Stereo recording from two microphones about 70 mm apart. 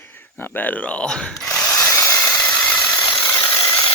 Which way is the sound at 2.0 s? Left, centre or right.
Left.